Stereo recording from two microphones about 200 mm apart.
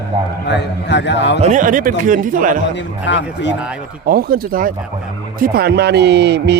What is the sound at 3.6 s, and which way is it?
Speech, 5° right (ahead or behind).